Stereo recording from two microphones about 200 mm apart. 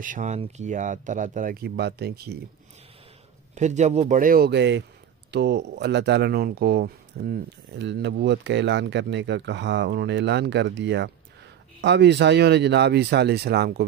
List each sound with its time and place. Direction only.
0.0 s speech: 40° right (ahead or behind)
3.5 s speech: 35° right (ahead or behind); by 13.8 s 55° right (ahead or behind)